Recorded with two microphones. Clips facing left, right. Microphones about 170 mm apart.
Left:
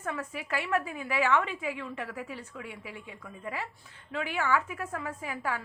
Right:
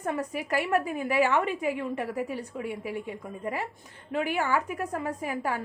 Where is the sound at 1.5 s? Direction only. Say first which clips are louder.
Right 7 dB; 45° right (ahead or behind).